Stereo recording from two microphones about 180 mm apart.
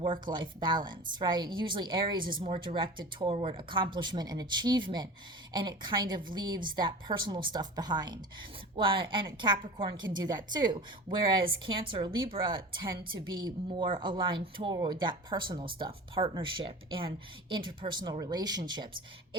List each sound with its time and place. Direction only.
0.1 s a woman's voice: 25° right (ahead or behind)